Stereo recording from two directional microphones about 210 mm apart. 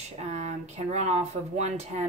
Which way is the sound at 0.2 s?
35° right (ahead or behind).